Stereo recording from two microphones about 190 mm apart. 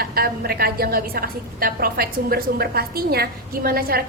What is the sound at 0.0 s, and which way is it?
A woman's voice, 55° right (ahead or behind).